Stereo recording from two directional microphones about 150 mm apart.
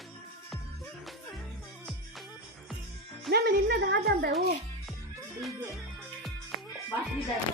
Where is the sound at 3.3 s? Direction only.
90° right.